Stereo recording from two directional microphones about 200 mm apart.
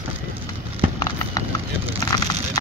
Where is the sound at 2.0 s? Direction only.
20° left (ahead or behind).